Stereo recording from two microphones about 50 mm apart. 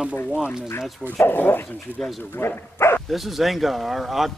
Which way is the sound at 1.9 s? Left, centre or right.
Right.